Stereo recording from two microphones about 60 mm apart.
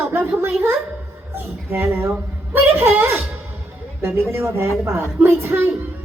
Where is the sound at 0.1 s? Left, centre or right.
Right.